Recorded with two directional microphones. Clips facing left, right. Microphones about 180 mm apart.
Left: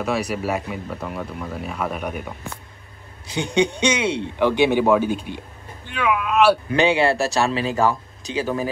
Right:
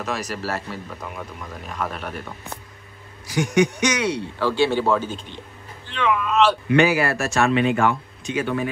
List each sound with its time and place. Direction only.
0.0 s speech: 10° left (ahead or behind)
3.3 s speech: 25° left (ahead or behind); by 6.6 s 10° left (ahead or behind)
6.7 s speech: 30° left (ahead or behind)